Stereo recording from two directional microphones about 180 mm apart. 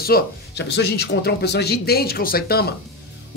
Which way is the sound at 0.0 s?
65° left (ahead or behind).